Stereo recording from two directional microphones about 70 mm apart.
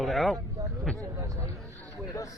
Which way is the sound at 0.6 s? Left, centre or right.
Right.